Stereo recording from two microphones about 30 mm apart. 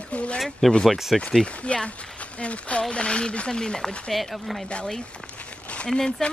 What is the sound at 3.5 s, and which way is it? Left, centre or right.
Speech, left.